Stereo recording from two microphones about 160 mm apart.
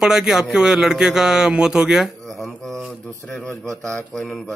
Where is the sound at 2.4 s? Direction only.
10° left (ahead or behind).